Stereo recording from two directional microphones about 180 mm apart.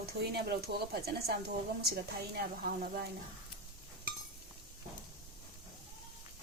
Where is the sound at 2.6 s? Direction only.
50° right (ahead or behind).